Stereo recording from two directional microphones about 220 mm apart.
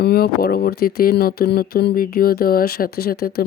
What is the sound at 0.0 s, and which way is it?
Speech, 45° left (ahead or behind).